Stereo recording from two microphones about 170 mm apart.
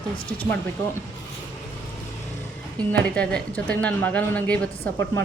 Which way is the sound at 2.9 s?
5° left (ahead or behind).